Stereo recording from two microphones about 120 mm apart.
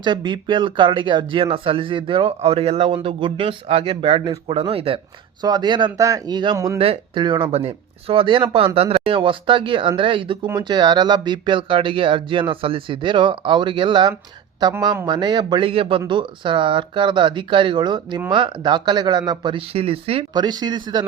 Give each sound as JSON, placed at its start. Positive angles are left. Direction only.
{"t": 0.0, "sound": "speech", "side_deg": -40}
{"t": 2.9, "sound": "speech", "side_deg": -45}
{"t": 5.4, "sound": "speech", "side_deg": -35}
{"t": 6.7, "sound": "speech", "side_deg": -50}
{"t": 20.3, "sound": "speech", "side_deg": -35}